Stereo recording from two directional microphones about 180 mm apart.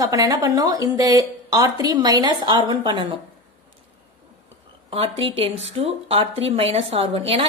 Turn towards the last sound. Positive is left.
turn(degrees=-30)  # may be behind; listen again after turning